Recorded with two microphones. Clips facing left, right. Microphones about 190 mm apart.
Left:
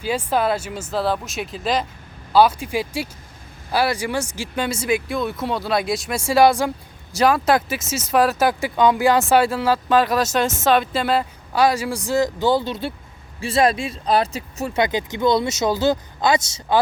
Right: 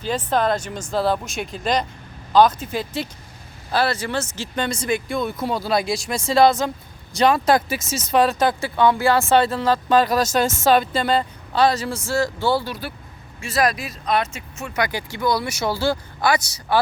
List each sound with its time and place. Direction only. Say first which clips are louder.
0.0 s speech: even; 10° left (ahead or behind)